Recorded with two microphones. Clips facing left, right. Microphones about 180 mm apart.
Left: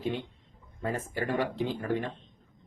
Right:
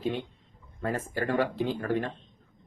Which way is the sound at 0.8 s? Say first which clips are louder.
Right 2 dB; 15° left (ahead or behind).